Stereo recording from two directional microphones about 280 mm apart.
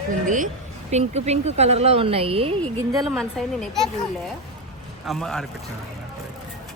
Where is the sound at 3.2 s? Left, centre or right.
Centre.